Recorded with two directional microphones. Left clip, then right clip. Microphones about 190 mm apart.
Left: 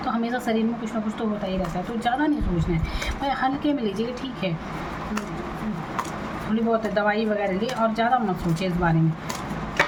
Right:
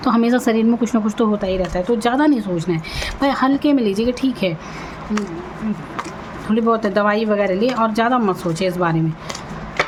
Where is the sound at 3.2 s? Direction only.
45° right (ahead or behind).